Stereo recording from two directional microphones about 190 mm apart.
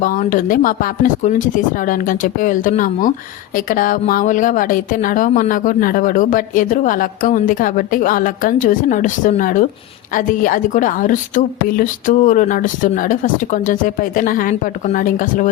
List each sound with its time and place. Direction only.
0.0 s a woman's voice: 45° left (ahead or behind)